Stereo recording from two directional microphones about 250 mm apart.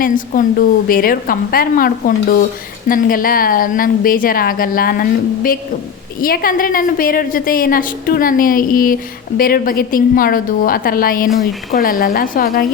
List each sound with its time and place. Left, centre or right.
0.0 s a woman's voice: left